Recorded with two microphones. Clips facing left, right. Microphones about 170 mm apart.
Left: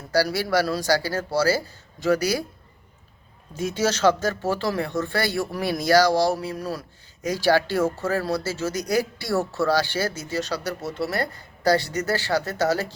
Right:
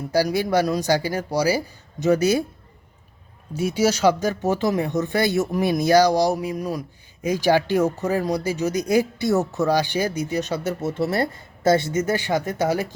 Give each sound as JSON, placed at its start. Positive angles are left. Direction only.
{"t": 0.1, "sound": "speech", "side_deg": -15}
{"t": 3.5, "sound": "speech", "side_deg": -10}